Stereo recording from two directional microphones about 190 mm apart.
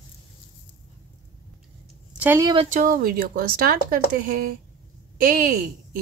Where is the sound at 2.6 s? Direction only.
45° right (ahead or behind).